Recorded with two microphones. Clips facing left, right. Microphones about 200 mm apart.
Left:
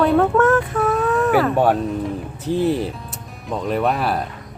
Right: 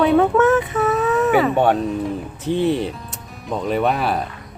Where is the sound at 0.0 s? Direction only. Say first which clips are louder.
Right 1 dB; centre (ahead or behind).